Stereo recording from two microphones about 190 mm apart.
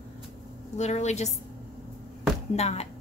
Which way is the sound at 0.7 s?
35° left (ahead or behind).